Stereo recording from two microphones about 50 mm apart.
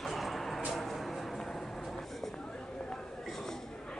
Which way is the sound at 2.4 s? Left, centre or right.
Left.